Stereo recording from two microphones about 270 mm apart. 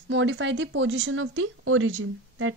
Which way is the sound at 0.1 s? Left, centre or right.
Right.